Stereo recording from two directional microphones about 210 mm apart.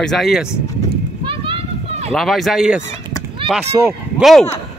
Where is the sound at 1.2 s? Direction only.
25° right (ahead or behind).